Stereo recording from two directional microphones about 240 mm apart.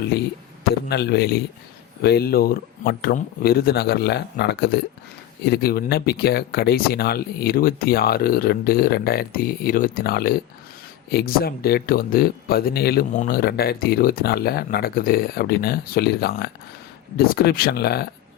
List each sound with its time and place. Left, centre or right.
0.9 s a man's voice: left